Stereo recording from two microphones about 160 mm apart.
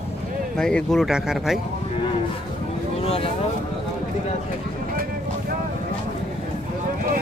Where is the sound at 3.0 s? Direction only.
35° left (ahead or behind).